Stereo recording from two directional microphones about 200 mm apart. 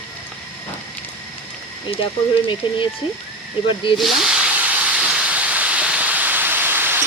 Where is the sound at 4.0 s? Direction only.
Centre (ahead or behind).